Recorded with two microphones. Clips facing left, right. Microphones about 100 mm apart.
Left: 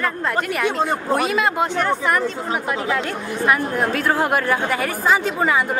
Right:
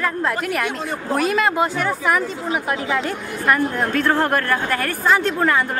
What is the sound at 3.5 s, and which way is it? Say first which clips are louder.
A woman's voice: right 1 dB; 5° left (ahead or behind).